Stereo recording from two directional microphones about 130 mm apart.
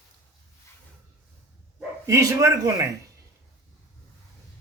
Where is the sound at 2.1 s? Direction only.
25° right (ahead or behind).